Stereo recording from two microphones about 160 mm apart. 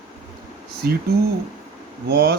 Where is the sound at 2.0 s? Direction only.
90° right.